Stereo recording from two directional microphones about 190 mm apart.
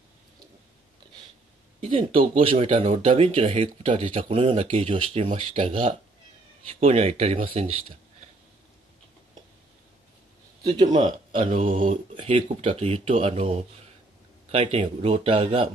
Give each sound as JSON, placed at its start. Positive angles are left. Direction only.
{"t": 1.8, "sound": "speech", "side_deg": -30}
{"t": 10.6, "sound": "speech", "side_deg": -25}
{"t": 10.9, "sound": "speech", "side_deg": -35}